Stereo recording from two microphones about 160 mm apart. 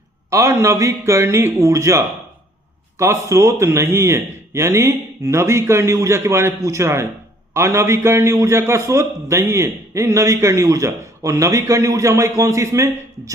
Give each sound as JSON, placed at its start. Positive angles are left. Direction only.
{"t": 0.3, "sound": "a man's voice", "side_deg": -20}